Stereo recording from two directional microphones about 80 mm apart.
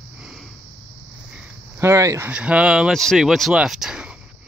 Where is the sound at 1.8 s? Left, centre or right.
Right.